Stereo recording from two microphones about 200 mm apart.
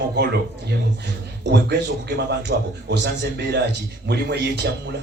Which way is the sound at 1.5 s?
60° right (ahead or behind).